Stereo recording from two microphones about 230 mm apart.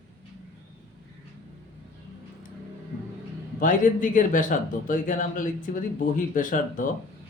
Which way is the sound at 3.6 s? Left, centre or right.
Left.